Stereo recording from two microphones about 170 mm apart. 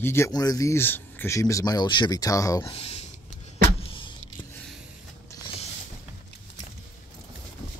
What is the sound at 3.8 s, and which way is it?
Vehicle, 30° left (ahead or behind).